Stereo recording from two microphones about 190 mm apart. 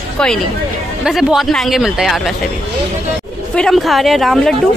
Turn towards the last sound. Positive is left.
turn(degrees=0)  # may be behind; listen again after turning